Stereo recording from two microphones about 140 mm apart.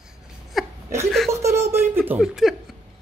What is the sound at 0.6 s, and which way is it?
Laughter, centre (ahead or behind).